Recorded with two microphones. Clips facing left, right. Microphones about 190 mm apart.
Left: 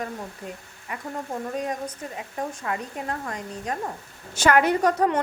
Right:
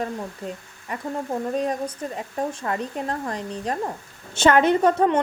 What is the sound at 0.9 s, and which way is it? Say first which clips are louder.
Speech: right 4 dB; 35° right (ahead or behind).